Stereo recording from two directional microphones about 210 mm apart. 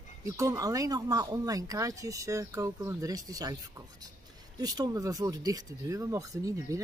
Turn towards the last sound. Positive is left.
turn(degrees=-15)  # may be behind; listen again after turning